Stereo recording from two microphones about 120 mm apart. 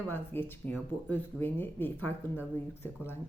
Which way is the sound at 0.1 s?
15° left (ahead or behind).